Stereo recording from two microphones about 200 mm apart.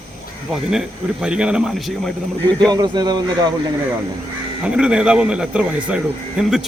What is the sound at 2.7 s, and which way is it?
Speech, 20° right (ahead or behind).